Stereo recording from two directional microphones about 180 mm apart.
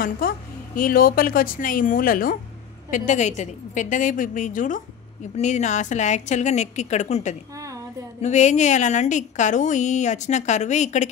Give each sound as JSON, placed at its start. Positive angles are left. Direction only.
{"t": 0.2, "sound": "a woman's voice", "side_deg": 55}
{"t": 7.5, "sound": "a sound", "side_deg": -20}
{"t": 8.2, "sound": "a woman's voice", "side_deg": 40}